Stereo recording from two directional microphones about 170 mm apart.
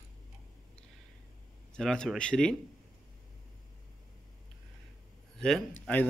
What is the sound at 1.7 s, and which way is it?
Speech, 5° left (ahead or behind).